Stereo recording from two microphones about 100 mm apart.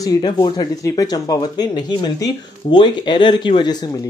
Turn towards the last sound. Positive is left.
turn(degrees=40)  # may be behind; listen again after turning